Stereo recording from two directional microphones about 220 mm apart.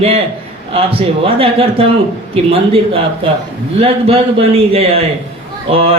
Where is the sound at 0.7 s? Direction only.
25° right (ahead or behind).